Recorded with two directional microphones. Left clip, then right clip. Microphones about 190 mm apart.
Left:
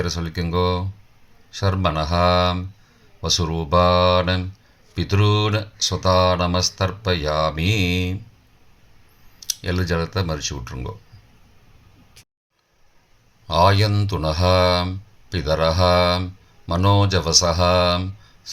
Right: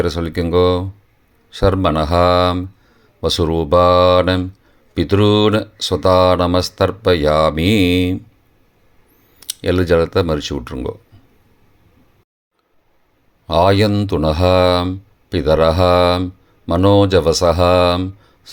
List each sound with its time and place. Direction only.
0.0 s speech: 45° right (ahead or behind)
9.5 s speech: 50° right (ahead or behind)
13.5 s speech: 45° right (ahead or behind)